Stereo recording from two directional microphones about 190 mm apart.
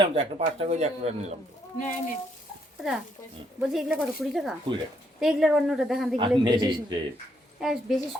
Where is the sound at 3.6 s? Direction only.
Centre (ahead or behind).